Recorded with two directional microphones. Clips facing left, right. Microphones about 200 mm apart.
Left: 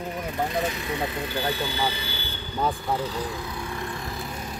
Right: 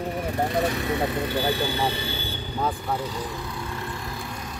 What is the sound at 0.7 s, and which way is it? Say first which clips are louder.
Speech: right 4 dB; 50° right (ahead or behind).